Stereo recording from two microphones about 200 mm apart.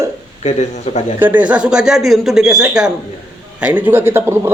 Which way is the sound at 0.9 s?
35° left (ahead or behind).